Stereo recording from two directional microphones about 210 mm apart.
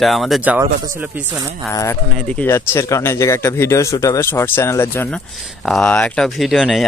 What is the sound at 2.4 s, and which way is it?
Speech, 10° left (ahead or behind).